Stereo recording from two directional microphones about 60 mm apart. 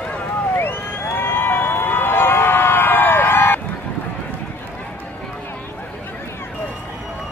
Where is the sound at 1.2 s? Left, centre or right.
Left.